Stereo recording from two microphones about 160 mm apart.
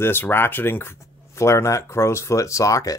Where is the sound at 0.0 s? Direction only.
15° left (ahead or behind).